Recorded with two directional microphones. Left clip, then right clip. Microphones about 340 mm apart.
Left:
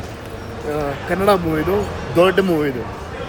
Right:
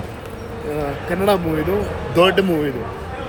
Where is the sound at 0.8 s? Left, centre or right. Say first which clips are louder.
Left 2 dB; centre.